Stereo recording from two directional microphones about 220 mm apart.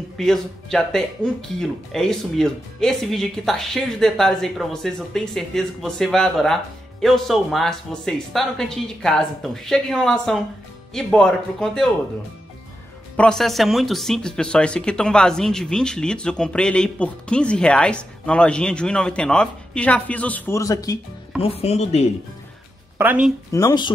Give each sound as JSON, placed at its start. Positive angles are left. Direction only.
{"t": 0.2, "sound": "speech", "side_deg": 0}
{"t": 13.1, "sound": "speech", "side_deg": 5}
{"t": 21.4, "sound": "speech", "side_deg": 25}
{"t": 22.9, "sound": "speech", "side_deg": -5}
{"t": 23.5, "sound": "speech", "side_deg": 15}